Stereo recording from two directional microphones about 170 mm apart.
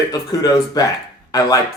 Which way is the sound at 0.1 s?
20° left (ahead or behind).